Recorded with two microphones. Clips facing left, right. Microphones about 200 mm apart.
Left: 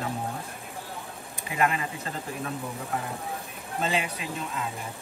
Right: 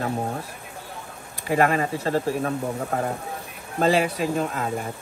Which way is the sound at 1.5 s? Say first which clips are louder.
Right 7 dB; 55° right (ahead or behind).